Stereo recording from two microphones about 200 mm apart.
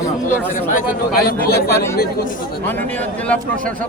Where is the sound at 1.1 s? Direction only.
50° left (ahead or behind).